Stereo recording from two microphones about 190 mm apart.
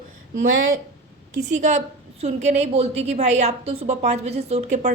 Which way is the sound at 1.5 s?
40° right (ahead or behind).